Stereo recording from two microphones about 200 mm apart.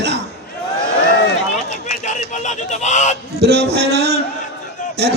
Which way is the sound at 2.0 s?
35° left (ahead or behind).